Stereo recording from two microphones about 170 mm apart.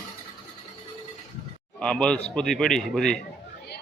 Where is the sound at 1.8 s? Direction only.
5° left (ahead or behind).